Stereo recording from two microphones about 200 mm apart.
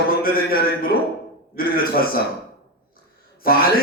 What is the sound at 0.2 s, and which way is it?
A man's voice, 50° left (ahead or behind).